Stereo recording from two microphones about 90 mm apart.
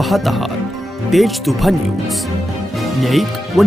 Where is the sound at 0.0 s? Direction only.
Centre (ahead or behind).